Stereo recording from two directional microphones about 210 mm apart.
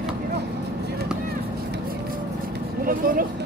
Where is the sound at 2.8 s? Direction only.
45° right (ahead or behind).